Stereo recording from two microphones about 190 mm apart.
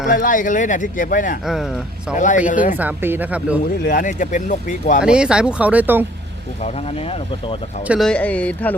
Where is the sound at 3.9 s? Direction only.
45° left (ahead or behind).